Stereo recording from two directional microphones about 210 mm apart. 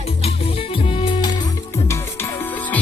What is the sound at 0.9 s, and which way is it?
Music, 25° left (ahead or behind).